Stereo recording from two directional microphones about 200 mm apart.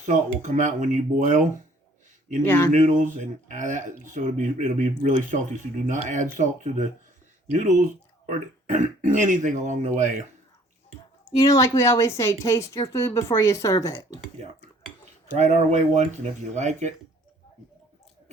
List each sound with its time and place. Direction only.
0.0 s speech: 40° right (ahead or behind)
2.4 s speech: 10° left (ahead or behind)
3.2 s speech: 40° right (ahead or behind)
11.3 s speech: 15° left (ahead or behind)
15.4 s speech: 35° right (ahead or behind)